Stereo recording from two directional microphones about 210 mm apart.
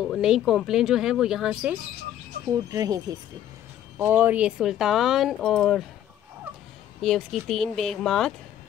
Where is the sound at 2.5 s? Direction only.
15° right (ahead or behind); by 5.8 s centre (ahead or behind).